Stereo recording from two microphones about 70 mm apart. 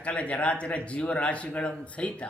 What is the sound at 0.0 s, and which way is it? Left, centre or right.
Speech, centre.